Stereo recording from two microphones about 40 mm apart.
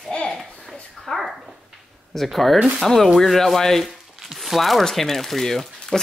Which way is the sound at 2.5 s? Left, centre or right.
Right.